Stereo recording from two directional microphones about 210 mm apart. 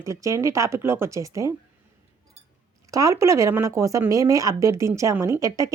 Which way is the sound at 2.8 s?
15° right (ahead or behind).